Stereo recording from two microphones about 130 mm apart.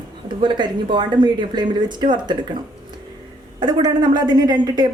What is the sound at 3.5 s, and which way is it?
Speech, 35° right (ahead or behind).